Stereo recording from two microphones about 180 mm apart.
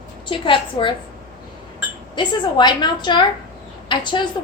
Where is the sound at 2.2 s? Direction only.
25° left (ahead or behind).